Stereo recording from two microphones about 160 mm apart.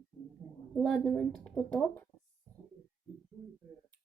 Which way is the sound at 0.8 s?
Centre (ahead or behind).